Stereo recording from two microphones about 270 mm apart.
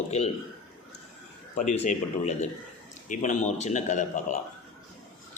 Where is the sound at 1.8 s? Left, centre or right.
Left.